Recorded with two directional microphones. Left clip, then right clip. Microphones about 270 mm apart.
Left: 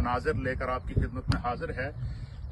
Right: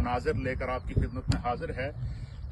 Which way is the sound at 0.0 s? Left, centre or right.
Centre.